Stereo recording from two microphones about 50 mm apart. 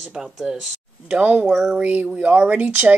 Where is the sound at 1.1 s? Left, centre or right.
Right.